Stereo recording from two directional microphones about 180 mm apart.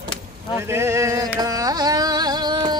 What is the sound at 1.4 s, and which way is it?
Carnatic music, 20° right (ahead or behind).